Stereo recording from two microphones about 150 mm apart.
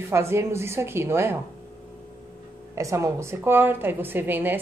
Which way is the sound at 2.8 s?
20° right (ahead or behind).